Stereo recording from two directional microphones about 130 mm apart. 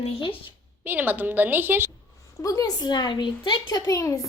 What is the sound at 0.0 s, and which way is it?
Speech, 45° left (ahead or behind).